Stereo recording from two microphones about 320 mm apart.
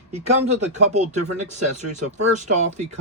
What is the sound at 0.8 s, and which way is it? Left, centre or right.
Speech, right.